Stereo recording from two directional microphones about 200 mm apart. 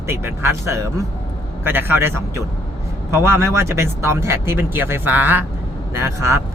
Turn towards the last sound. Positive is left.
turn(degrees=-15)  # may be behind; listen again after turning